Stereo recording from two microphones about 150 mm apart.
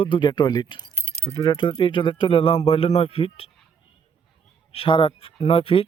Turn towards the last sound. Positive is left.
turn(degrees=40)  # may be behind; listen again after turning